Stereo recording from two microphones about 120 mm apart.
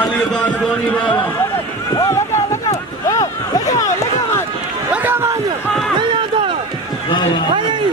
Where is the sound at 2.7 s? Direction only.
30° left (ahead or behind).